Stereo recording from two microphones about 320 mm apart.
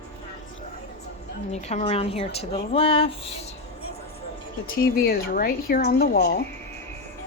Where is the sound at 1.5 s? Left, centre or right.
Left.